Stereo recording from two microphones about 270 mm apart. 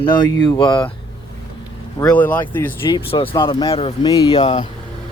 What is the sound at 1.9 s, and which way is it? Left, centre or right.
Speech, centre.